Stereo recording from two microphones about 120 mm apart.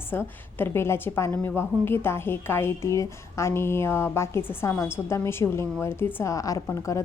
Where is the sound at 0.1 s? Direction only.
20° left (ahead or behind).